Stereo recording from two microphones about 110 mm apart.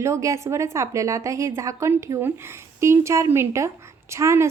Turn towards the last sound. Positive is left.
turn(degrees=-25)  # may be behind; listen again after turning